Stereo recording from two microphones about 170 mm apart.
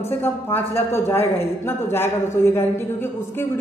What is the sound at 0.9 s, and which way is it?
A woman's voice, 15° left (ahead or behind).